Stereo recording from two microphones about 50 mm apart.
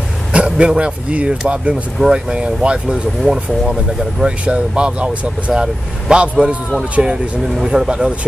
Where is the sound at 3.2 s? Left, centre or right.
Centre.